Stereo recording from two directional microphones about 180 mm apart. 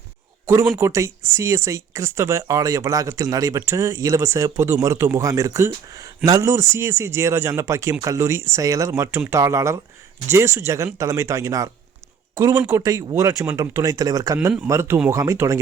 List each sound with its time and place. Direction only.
0.8 s speech: 15° right (ahead or behind)